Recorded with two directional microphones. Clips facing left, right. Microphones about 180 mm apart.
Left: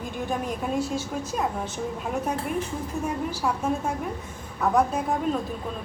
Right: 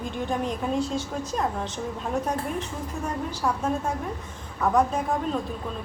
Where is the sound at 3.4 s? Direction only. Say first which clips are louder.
Right 1 dB; 10° left (ahead or behind).